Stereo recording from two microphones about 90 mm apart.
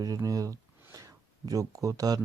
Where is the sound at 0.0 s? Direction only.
40° right (ahead or behind).